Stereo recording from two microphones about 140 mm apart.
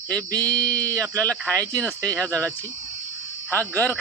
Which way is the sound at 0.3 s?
25° right (ahead or behind).